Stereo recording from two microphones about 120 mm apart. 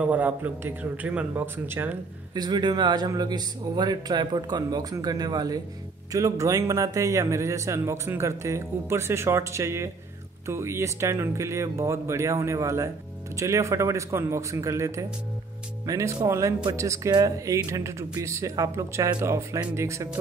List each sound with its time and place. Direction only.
0.0 s a man's voice: 15° right (ahead or behind)
2.3 s a man's voice: 35° right (ahead or behind)